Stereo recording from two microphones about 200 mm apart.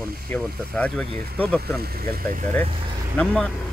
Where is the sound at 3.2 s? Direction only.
5° left (ahead or behind).